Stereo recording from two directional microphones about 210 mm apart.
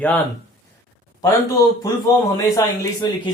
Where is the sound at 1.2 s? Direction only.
15° left (ahead or behind).